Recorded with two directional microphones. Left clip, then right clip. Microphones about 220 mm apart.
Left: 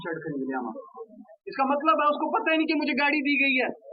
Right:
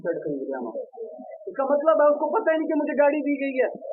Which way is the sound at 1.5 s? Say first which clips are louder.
Right 3 dB; 35° left (ahead or behind).